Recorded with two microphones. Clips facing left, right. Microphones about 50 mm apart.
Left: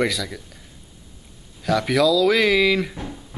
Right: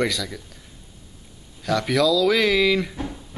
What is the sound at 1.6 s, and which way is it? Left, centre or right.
Speech, centre.